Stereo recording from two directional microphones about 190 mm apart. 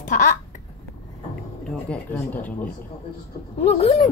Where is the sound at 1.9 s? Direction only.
10° left (ahead or behind).